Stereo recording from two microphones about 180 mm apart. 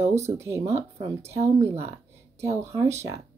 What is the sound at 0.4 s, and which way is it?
Speech, 15° right (ahead or behind).